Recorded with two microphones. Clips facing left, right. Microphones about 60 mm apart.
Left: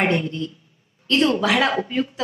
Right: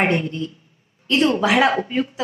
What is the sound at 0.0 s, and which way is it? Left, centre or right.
A woman's voice, centre.